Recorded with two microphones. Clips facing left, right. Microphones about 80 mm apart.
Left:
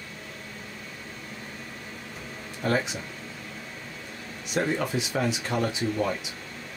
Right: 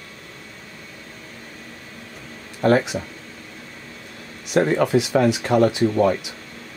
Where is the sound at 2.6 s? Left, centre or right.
Right.